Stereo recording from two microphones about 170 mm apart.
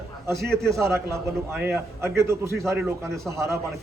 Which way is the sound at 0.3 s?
15° right (ahead or behind).